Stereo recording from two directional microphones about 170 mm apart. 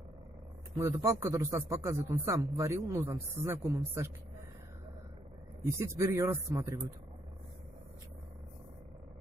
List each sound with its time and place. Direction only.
0.7 s a man's voice: 20° right (ahead or behind)
5.7 s a man's voice: 15° right (ahead or behind)